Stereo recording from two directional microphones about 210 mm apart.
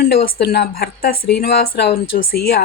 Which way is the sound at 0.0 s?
45° left (ahead or behind).